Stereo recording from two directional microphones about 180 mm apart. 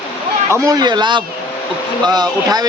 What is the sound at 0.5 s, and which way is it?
Speech, 20° right (ahead or behind).